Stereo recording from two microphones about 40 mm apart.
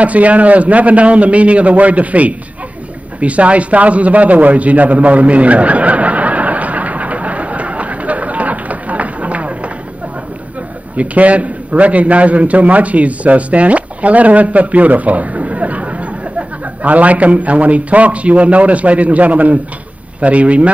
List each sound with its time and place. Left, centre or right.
0.0 s a man's voice: right
3.2 s a sound: right
11.0 s a man's voice: right